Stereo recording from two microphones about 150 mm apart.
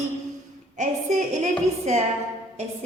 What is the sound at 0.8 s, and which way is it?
A woman's voice, 55° right (ahead or behind).